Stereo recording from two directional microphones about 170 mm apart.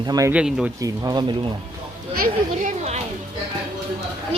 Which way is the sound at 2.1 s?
55° right (ahead or behind).